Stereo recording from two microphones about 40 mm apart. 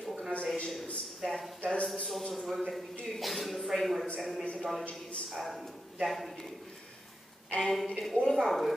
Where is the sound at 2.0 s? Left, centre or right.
Centre.